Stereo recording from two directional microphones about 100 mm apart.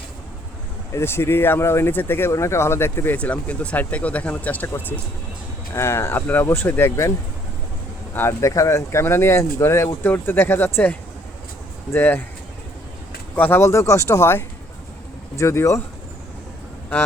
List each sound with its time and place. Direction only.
0.9 s speech: 25° left (ahead or behind)
3.2 s speech: 15° left (ahead or behind)
5.7 s speech: 30° left (ahead or behind)
8.1 s speech: 25° left (ahead or behind)
13.3 s speech: 20° left (ahead or behind)